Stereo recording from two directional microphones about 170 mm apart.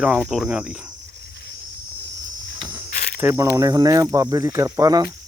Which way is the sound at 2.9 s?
65° left (ahead or behind).